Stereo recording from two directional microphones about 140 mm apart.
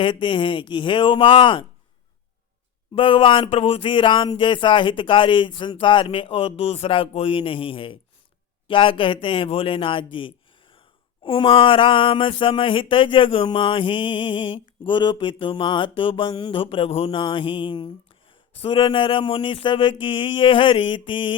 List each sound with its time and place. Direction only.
0.0 s speech: 35° left (ahead or behind)
2.9 s speech: 40° left (ahead or behind)